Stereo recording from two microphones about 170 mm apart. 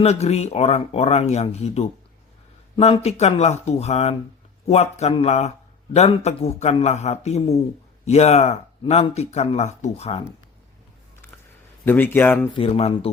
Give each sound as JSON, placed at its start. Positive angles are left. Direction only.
{"t": 0.0, "sound": "speech", "side_deg": 40}
{"t": 11.9, "sound": "speech", "side_deg": 10}
{"t": 12.5, "sound": "speech", "side_deg": 35}